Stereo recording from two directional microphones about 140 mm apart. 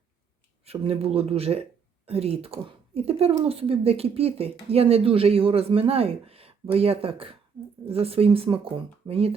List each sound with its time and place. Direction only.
0.6 s speech: 45° right (ahead or behind)